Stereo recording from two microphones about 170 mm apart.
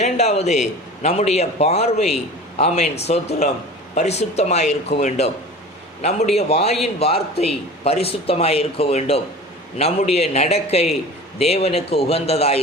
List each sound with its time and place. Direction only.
0.0 s a man's voice: 40° left (ahead or behind)